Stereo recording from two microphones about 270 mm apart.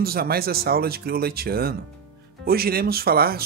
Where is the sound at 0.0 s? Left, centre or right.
Right.